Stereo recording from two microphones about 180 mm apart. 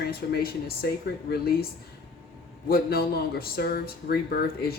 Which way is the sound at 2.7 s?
60° left (ahead or behind).